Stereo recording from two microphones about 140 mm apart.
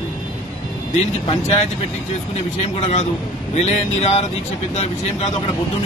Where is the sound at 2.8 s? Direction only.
55° left (ahead or behind).